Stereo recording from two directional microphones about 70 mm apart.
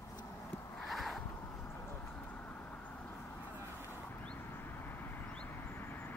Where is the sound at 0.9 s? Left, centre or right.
Centre.